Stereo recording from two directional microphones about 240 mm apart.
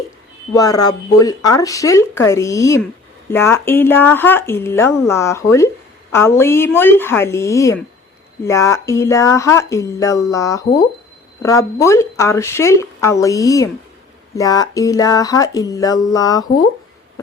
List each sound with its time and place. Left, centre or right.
0.5 s speech: centre